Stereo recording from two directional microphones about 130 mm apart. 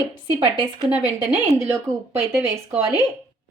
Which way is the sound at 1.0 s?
15° right (ahead or behind).